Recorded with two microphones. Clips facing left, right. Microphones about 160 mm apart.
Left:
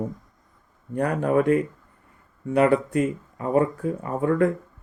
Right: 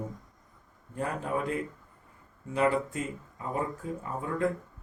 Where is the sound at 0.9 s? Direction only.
70° left (ahead or behind).